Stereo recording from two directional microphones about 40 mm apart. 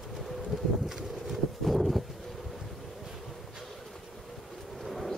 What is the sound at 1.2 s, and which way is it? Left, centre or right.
Horse, centre.